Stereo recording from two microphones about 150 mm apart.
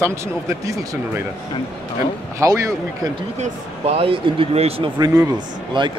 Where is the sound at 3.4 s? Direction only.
40° right (ahead or behind).